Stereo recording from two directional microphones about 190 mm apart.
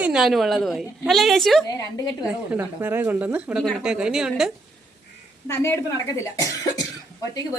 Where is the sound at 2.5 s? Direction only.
10° right (ahead or behind).